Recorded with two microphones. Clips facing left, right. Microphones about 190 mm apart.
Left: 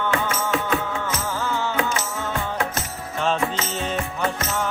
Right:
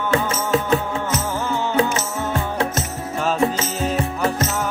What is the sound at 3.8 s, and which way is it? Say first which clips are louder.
Music: right 5 dB; 35° right (ahead or behind).